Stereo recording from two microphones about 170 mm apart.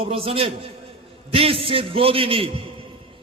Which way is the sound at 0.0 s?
35° right (ahead or behind).